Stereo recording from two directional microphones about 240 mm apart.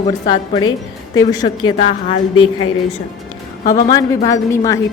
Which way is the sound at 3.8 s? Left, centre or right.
Centre.